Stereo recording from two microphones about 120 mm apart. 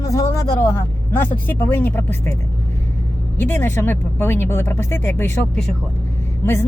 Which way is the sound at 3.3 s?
15° left (ahead or behind).